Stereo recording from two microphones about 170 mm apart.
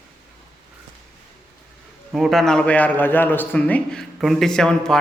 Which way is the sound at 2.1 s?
Centre (ahead or behind).